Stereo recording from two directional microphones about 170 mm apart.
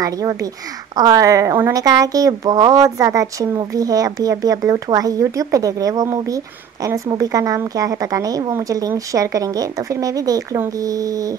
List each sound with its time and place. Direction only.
0.0 s a woman's voice: 20° right (ahead or behind)